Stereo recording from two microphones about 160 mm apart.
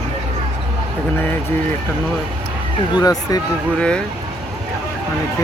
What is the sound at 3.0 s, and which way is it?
Speech, 25° left (ahead or behind).